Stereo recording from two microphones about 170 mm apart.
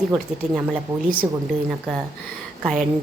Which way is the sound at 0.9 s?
15° right (ahead or behind).